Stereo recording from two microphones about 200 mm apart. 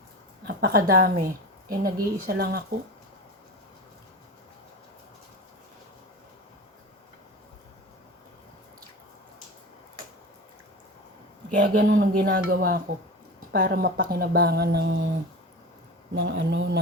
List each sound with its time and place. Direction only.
0.4 s a woman's voice: 45° right (ahead or behind)
11.5 s speech: 50° right (ahead or behind)
16.2 s speech: 60° right (ahead or behind)